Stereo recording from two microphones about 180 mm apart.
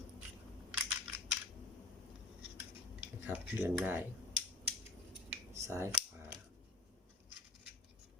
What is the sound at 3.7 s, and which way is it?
Speech, 10° right (ahead or behind).